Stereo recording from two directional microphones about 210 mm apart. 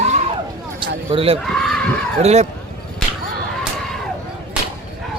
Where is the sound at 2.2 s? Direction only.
30° right (ahead or behind).